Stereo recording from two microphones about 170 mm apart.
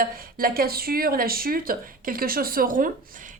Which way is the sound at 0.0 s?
60° right (ahead or behind).